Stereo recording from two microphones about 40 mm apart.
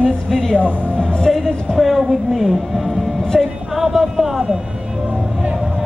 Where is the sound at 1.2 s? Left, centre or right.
Centre.